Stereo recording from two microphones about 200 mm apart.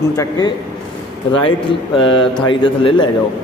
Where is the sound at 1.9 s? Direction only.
25° left (ahead or behind).